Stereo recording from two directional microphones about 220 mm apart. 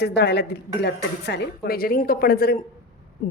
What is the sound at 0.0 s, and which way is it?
A woman's voice, 50° left (ahead or behind).